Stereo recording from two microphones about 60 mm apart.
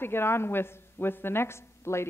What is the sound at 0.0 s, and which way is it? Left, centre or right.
A woman's voice, left.